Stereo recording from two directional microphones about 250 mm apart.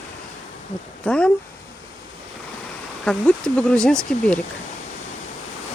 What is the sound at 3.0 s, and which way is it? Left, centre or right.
Speech, centre.